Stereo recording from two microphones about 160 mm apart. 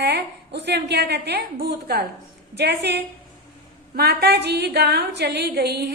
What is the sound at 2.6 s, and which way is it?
A woman's voice, 90° right.